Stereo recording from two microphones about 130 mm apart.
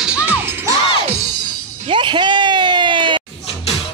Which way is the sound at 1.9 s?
40° right (ahead or behind).